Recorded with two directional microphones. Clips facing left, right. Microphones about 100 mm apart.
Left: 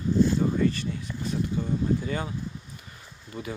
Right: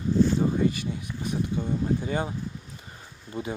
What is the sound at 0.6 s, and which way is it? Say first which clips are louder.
Speech: even; 15° right (ahead or behind).